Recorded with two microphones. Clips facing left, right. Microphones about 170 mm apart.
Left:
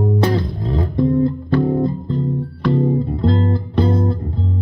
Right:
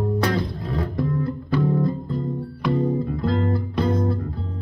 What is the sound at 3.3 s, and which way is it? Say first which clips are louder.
Music: left 4 dB; 35° left (ahead or behind).